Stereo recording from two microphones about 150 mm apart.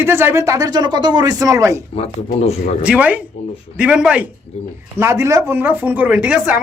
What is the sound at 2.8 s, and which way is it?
A woman's voice, 10° right (ahead or behind).